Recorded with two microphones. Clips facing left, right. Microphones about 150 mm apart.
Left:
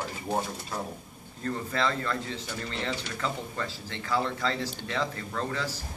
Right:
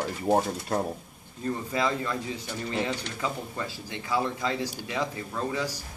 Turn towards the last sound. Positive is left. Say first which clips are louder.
# right 2 dB
turn(degrees=-15)  # may be behind; listen again after turning